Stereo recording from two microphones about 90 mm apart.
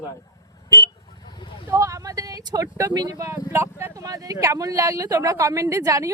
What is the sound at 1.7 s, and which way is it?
Speech, 40° right (ahead or behind).